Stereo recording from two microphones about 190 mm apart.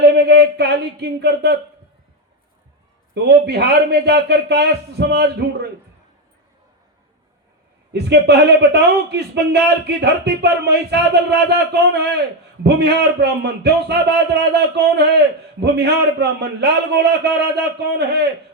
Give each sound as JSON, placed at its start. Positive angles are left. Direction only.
{"t": 0.1, "sound": "a sound", "side_deg": -60}
{"t": 3.2, "sound": "a man's voice", "side_deg": -60}
{"t": 7.9, "sound": "a man's voice", "side_deg": -60}